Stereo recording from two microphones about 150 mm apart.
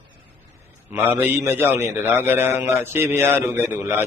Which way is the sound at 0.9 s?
15° right (ahead or behind).